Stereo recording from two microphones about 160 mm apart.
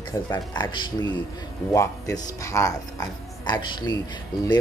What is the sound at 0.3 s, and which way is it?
Speech, 25° left (ahead or behind).